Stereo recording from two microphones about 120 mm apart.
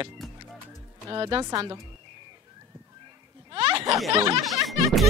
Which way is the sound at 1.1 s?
40° right (ahead or behind).